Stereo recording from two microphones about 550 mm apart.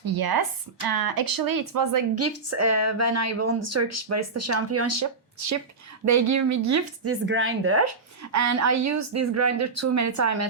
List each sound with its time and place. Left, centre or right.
0.0 s a woman's voice: right